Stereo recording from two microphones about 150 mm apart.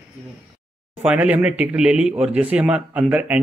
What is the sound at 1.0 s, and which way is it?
A man's voice, 10° right (ahead or behind).